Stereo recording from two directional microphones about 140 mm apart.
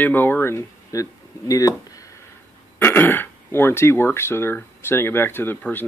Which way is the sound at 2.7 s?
15° left (ahead or behind).